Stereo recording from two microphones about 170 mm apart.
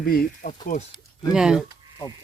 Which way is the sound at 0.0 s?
60° left (ahead or behind).